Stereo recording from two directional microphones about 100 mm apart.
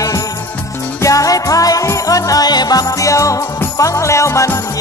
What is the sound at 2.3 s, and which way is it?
Music, 40° left (ahead or behind).